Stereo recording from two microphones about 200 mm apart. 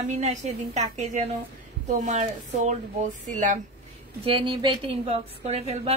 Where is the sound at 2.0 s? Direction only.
35° right (ahead or behind).